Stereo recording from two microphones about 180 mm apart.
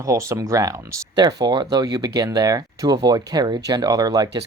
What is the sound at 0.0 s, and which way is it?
Speech, 15° right (ahead or behind).